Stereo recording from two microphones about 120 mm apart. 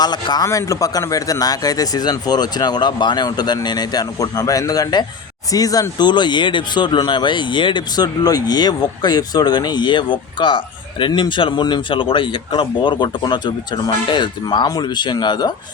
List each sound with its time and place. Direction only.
0.0 s speech: 35° left (ahead or behind)